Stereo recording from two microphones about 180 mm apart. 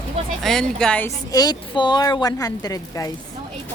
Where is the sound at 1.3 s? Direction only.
20° left (ahead or behind).